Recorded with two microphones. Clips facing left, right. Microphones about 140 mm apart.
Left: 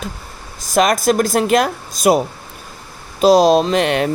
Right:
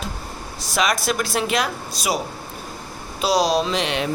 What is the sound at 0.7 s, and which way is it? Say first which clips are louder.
Speech: left 8 dB; 50° left (ahead or behind).